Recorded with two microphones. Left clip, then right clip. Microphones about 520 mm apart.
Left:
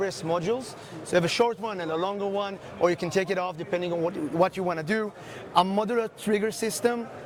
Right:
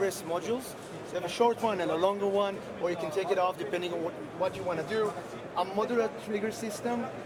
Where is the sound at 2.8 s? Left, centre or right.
Left.